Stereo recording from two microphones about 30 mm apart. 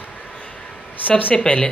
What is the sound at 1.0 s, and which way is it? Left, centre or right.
Speech, left.